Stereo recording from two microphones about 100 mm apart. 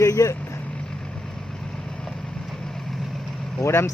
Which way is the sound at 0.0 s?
30° left (ahead or behind).